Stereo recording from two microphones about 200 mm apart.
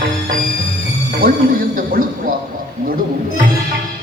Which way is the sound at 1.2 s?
45° right (ahead or behind).